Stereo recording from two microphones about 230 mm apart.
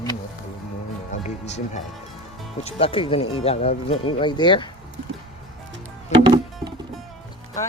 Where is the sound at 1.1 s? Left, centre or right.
Left.